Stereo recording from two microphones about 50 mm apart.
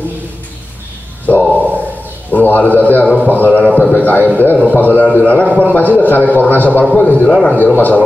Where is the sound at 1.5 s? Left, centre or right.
Right.